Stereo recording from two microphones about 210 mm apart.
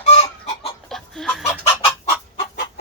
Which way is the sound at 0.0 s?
30° left (ahead or behind).